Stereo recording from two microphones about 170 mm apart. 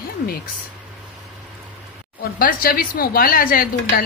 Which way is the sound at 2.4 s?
60° left (ahead or behind).